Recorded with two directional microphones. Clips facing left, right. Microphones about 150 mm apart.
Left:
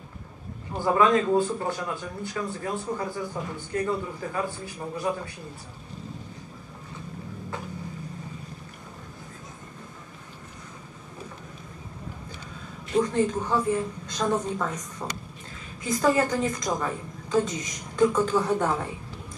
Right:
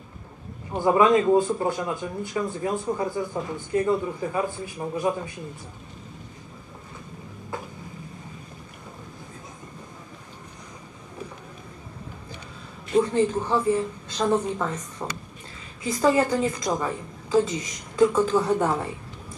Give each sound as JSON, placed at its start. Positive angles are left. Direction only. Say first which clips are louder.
{"t": 0.7, "sound": "a man's voice", "louder": "right 3 dB", "side_deg": -15}
{"t": 3.3, "sound": "speech", "louder": "right 5 dB", "side_deg": -5}
{"t": 4.3, "sound": "a man's voice", "louder": "right 3 dB", "side_deg": -15}
{"t": 12.9, "sound": "a man's voice", "louder": "right 3 dB", "side_deg": -10}